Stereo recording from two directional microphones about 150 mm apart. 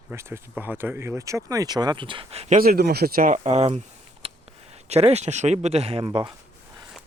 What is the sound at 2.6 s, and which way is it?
Speech, 90° right.